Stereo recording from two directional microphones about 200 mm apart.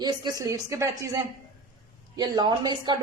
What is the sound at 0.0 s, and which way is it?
A woman's voice, 20° right (ahead or behind).